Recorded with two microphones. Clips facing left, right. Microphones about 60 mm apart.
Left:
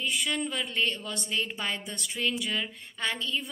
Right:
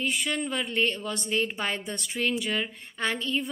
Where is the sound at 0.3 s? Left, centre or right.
Right.